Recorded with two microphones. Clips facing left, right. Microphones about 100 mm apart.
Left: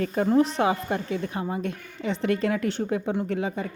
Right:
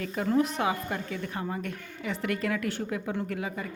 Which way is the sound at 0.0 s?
40° left (ahead or behind).